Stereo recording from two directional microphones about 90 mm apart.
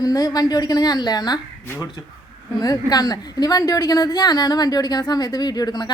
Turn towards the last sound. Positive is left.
turn(degrees=50)  # may be behind; listen again after turning